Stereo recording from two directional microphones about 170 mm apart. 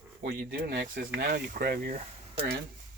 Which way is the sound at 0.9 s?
55° right (ahead or behind).